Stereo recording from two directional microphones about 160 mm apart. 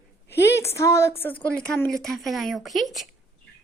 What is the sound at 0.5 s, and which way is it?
A woman's voice, 15° left (ahead or behind).